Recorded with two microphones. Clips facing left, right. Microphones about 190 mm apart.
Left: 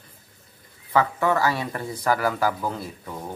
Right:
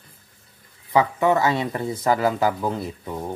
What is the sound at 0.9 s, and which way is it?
Speech, 15° right (ahead or behind).